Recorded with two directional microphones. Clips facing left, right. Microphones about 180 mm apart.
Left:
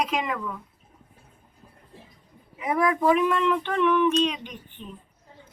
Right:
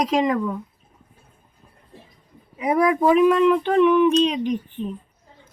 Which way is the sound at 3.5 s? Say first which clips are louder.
Right 7 dB; 45° right (ahead or behind).